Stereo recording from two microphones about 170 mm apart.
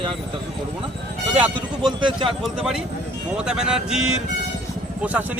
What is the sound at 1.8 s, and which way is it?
Speech, 30° right (ahead or behind).